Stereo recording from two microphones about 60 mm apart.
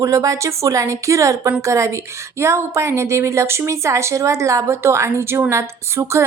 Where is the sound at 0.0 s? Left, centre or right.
Right.